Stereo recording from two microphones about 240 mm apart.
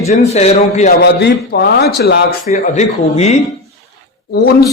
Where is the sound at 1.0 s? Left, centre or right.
Left.